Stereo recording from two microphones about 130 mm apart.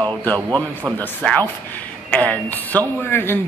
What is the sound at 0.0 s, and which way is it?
A man's voice, 10° left (ahead or behind).